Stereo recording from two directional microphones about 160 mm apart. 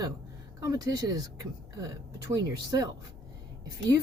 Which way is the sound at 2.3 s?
20° right (ahead or behind).